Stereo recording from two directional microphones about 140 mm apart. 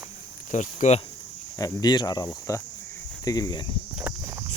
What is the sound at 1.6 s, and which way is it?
Speech, 25° left (ahead or behind).